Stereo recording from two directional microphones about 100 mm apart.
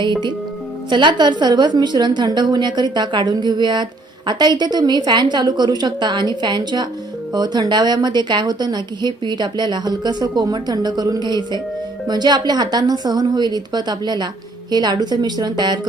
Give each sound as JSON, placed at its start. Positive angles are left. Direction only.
{"t": 0.0, "sound": "a woman's voice", "side_deg": -50}